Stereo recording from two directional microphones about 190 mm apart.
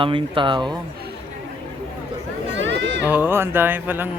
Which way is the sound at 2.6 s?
70° right (ahead or behind).